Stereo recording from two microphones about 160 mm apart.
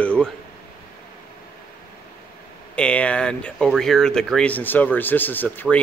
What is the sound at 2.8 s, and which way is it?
Speech, 5° left (ahead or behind).